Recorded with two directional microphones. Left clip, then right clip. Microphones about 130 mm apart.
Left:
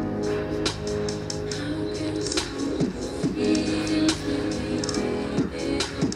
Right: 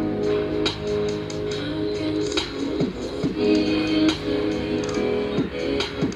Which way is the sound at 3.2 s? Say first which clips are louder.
Right 4 dB; 25° right (ahead or behind).